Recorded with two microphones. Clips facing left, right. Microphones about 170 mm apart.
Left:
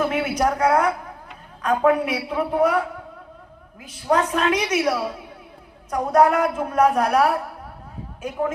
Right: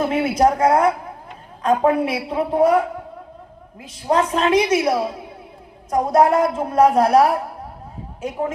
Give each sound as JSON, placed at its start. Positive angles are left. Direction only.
{"t": 0.0, "sound": "a woman's voice", "side_deg": -30}